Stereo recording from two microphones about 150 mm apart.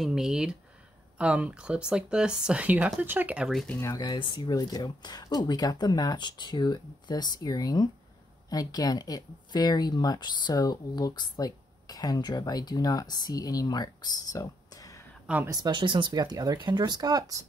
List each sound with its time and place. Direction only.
0.0 s speech: 5° right (ahead or behind)
3.8 s speech: 25° left (ahead or behind)
15.2 s speech: 10° right (ahead or behind)
15.5 s speech: 30° right (ahead or behind)